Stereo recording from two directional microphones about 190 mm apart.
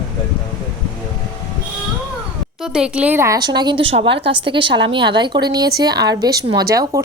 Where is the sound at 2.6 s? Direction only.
5° right (ahead or behind).